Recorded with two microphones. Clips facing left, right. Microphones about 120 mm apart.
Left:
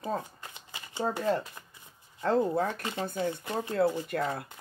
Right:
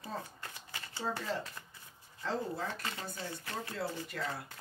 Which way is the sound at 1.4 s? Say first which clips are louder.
Left 1 dB; 20° left (ahead or behind).